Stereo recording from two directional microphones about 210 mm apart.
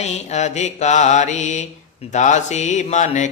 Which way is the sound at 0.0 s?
35° left (ahead or behind).